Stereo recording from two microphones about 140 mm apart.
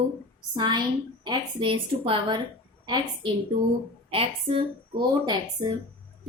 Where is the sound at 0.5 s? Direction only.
35° right (ahead or behind).